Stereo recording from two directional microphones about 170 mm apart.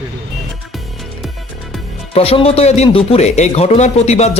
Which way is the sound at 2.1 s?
35° left (ahead or behind).